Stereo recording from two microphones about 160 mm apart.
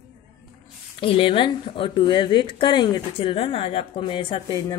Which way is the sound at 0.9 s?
35° left (ahead or behind).